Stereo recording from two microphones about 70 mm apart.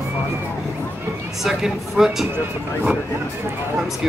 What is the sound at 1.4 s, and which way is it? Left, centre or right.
Speech, centre.